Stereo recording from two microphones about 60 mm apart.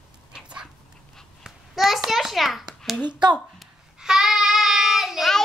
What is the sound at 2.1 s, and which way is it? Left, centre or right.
Speech, centre.